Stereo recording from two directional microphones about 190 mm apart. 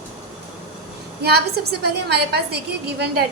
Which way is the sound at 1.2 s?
55° right (ahead or behind).